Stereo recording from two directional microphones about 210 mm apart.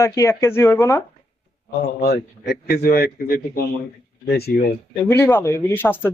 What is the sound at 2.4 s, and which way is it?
A man's voice, 45° left (ahead or behind).